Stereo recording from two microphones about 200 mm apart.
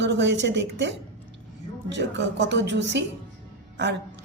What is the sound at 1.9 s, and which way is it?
Speech, 60° right (ahead or behind).